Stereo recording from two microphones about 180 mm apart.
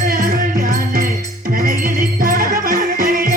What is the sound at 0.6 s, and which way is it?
Music, 50° right (ahead or behind).